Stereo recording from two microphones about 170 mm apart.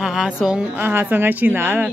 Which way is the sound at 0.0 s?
5° right (ahead or behind).